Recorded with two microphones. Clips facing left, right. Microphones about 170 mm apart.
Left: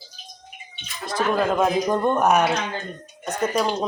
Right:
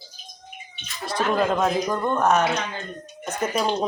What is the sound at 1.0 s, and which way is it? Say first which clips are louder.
Speech: even; 5° left (ahead or behind).